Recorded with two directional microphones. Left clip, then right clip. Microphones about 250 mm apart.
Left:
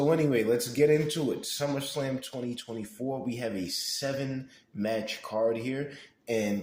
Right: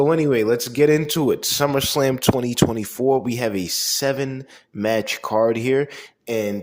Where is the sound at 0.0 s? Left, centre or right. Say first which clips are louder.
Right 8 dB; right.